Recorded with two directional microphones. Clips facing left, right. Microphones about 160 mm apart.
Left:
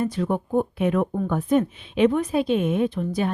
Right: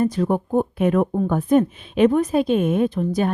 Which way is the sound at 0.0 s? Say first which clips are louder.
Right 4 dB; 40° right (ahead or behind).